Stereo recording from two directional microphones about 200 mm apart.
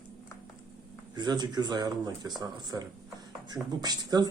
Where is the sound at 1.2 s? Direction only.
20° right (ahead or behind).